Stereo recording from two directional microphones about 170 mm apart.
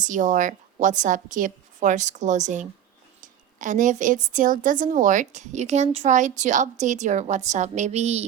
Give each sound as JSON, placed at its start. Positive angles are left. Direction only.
{"t": 0.0, "sound": "a woman's voice", "side_deg": -45}